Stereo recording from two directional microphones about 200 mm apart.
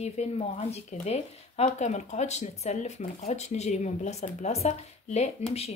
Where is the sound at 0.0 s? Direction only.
30° left (ahead or behind).